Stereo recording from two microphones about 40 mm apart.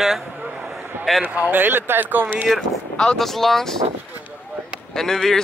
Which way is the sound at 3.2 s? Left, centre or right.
Centre.